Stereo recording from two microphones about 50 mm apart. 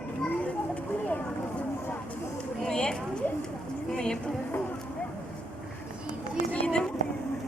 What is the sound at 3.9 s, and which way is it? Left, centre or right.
Vehicle, centre.